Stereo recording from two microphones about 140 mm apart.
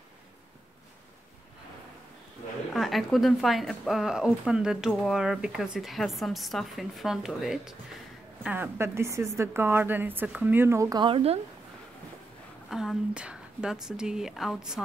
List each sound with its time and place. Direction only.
2.7 s speech: centre (ahead or behind)
8.5 s a woman's voice: 15° right (ahead or behind)
11.1 s speech: 40° right (ahead or behind)
12.6 s speech: 5° right (ahead or behind)